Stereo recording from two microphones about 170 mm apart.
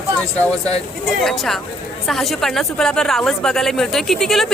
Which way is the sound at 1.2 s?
Centre (ahead or behind).